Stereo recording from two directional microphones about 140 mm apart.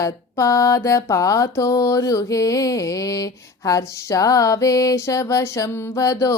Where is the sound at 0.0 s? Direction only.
20° left (ahead or behind).